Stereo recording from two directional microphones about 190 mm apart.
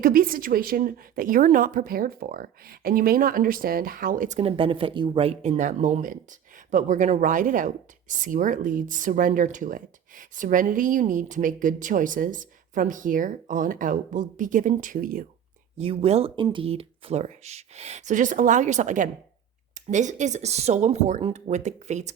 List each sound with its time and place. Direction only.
0.0 s speech: 50° right (ahead or behind)
15.8 s speech: 30° right (ahead or behind)